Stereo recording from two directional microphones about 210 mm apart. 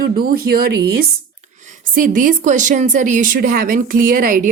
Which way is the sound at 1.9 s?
40° right (ahead or behind).